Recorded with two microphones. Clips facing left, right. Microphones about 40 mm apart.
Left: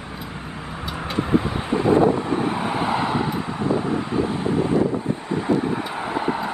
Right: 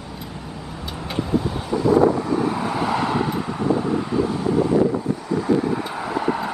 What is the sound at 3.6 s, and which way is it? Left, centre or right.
Wind, left.